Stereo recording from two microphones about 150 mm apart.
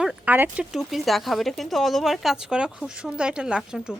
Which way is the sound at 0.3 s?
10° right (ahead or behind).